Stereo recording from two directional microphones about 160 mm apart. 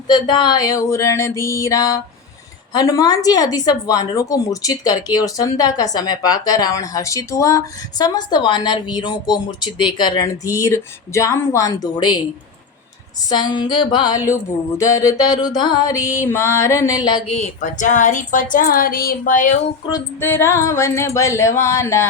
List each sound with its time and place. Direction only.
0.1 s a woman's voice: 30° left (ahead or behind)
13.3 s a woman's voice: 25° left (ahead or behind)
17.3 s a woman's voice: 45° left (ahead or behind)
18.5 s a sound: 60° left (ahead or behind)
19.9 s speech: 15° left (ahead or behind)